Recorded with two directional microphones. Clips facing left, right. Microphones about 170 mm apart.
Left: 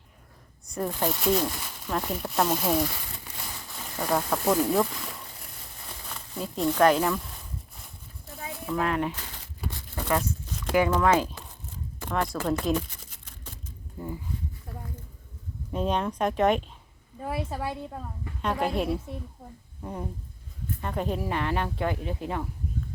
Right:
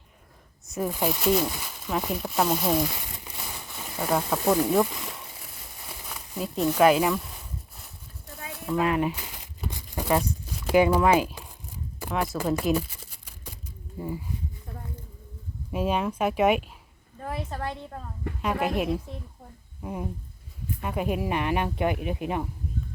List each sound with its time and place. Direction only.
0.7 s speech: 5° right (ahead or behind)
8.5 s snake: centre (ahead or behind)
8.8 s crumpling: 10° right (ahead or behind)
10.4 s a sound: 10° right (ahead or behind)
14.0 s speech: 10° right (ahead or behind)
15.7 s speech: 5° right (ahead or behind)
17.2 s a woman's voice: 10° left (ahead or behind)
18.4 s speech: 5° right (ahead or behind)
19.8 s speech: 10° right (ahead or behind)